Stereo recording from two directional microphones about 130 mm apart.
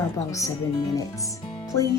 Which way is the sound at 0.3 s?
25° left (ahead or behind).